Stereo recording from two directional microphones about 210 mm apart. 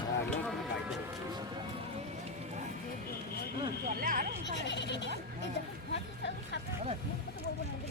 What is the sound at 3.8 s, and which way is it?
Speech, 40° right (ahead or behind).